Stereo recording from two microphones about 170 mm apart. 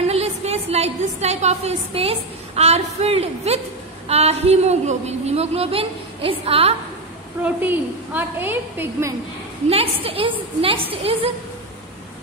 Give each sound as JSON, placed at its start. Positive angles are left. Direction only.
{"t": 0.0, "sound": "a woman's voice", "side_deg": -40}
{"t": 7.4, "sound": "a woman's voice", "side_deg": -10}
{"t": 9.7, "sound": "a woman's voice", "side_deg": -35}